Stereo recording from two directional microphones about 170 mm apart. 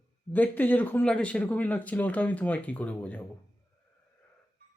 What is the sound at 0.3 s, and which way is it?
Speech, 10° left (ahead or behind).